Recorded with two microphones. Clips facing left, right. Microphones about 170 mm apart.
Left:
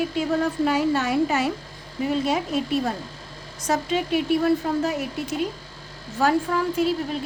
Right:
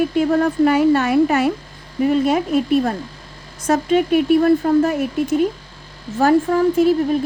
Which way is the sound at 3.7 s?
55° right (ahead or behind).